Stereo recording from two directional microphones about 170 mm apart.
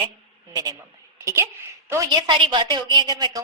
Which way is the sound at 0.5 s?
20° right (ahead or behind).